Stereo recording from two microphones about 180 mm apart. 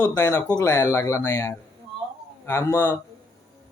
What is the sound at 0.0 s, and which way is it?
Speech, 15° left (ahead or behind).